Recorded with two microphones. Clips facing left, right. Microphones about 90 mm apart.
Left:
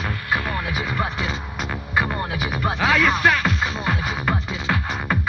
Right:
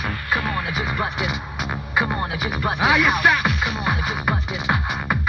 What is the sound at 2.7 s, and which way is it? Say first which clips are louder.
Music: right 1 dB; 15° right (ahead or behind).